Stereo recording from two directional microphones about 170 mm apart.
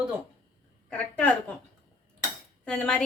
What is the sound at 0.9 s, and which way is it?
Speech, 10° left (ahead or behind).